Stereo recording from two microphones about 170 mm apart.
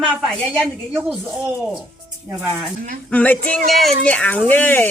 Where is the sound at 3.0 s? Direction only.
10° left (ahead or behind).